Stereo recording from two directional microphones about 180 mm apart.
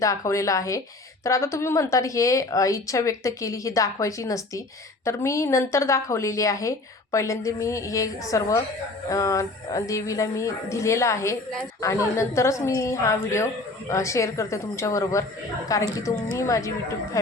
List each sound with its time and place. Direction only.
0.0 s speech: 15° left (ahead or behind)